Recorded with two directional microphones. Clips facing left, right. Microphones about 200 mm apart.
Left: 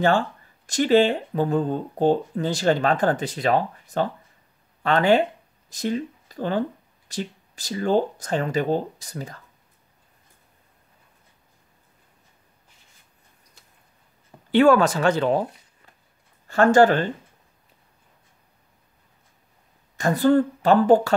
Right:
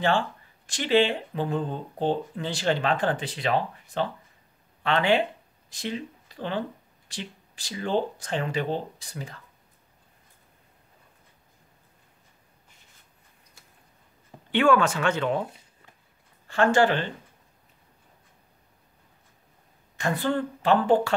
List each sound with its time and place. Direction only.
0.7 s speech: 45° left (ahead or behind)
14.5 s speech: 40° left (ahead or behind)
16.4 s speech: 40° left (ahead or behind)
20.0 s speech: 40° left (ahead or behind)